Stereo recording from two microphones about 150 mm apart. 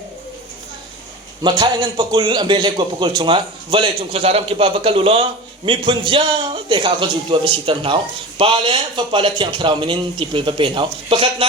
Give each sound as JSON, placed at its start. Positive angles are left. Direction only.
{"t": 1.4, "sound": "a man's voice", "side_deg": -30}